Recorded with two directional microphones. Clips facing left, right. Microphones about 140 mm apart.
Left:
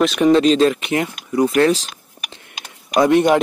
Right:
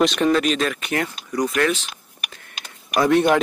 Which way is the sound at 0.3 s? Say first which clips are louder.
Left 7 dB; 30° left (ahead or behind).